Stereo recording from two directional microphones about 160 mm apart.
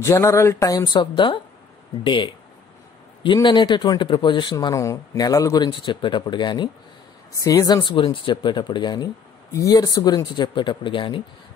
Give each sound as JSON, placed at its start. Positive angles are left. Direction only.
{"t": 0.0, "sound": "speech", "side_deg": 20}
{"t": 3.3, "sound": "speech", "side_deg": 30}